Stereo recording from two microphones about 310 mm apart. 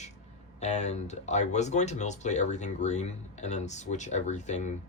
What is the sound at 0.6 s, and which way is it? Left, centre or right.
Speech, left.